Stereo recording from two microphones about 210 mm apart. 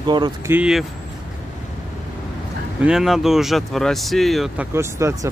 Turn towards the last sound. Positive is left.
turn(degrees=-10)  # may be behind; listen again after turning